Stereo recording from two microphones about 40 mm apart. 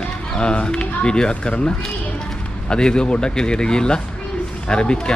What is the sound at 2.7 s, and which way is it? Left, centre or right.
Speech, left.